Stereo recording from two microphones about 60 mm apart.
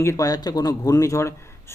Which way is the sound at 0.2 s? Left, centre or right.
Left.